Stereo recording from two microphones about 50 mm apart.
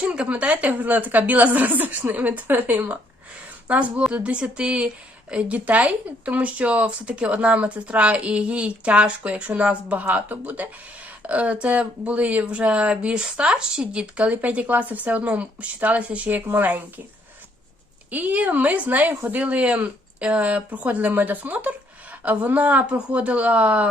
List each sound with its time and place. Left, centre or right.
0.0 s speech: right
18.1 s speech: right